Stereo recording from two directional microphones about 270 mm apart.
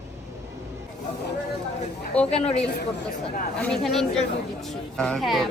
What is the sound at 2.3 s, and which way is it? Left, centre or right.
Speech, left.